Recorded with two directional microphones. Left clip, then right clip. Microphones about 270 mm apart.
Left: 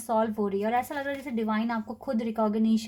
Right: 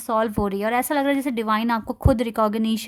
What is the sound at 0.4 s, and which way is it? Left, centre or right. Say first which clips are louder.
A woman's voice: right 5 dB; right.